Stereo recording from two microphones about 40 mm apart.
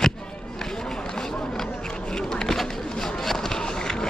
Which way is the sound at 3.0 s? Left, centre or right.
Centre.